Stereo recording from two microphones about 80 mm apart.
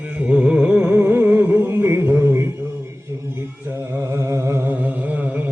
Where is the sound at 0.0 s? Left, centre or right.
Centre.